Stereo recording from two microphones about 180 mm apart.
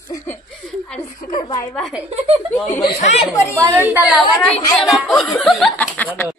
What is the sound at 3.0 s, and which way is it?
Speech, 35° left (ahead or behind).